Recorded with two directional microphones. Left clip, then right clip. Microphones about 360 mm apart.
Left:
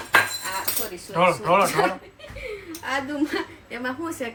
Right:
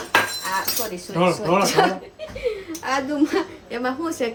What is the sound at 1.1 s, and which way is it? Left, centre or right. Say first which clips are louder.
Speech: left 1 dB; centre.